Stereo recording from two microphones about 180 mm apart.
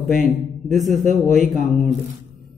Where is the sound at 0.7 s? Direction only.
45° right (ahead or behind).